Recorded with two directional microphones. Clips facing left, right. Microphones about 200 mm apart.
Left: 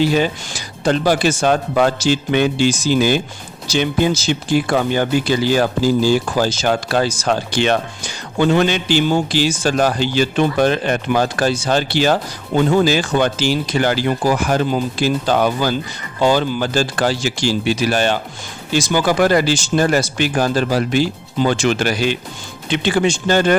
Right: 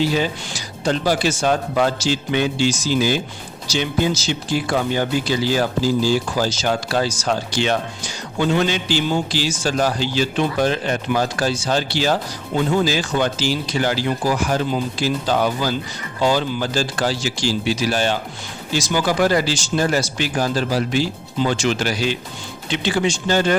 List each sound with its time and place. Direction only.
0.1 s speech: 60° left (ahead or behind)